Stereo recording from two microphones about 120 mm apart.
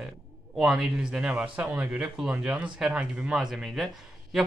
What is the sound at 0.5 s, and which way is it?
Speech, 5° right (ahead or behind).